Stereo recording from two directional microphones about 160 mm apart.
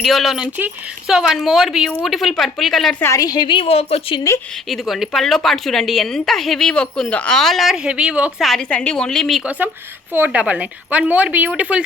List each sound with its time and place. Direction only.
0.0 s a woman's voice: centre (ahead or behind)
3.0 s a woman's voice: 20° left (ahead or behind); by 4.2 s 40° left (ahead or behind)
4.7 s a woman's voice: centre (ahead or behind)
10.1 s a woman's voice: 10° right (ahead or behind)